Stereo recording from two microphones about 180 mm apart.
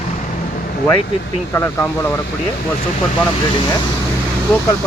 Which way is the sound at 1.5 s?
15° left (ahead or behind).